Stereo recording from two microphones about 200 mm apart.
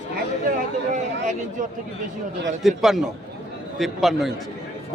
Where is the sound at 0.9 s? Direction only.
40° right (ahead or behind).